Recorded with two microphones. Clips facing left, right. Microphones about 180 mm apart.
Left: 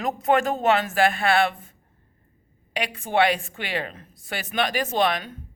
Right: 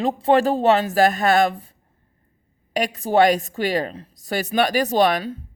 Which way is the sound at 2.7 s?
40° right (ahead or behind).